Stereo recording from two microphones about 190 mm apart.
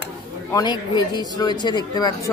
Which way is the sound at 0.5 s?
20° left (ahead or behind).